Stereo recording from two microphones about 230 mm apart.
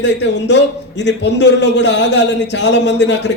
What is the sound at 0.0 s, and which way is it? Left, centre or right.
A man's voice, left.